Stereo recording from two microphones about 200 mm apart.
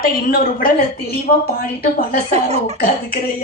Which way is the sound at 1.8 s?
50° left (ahead or behind).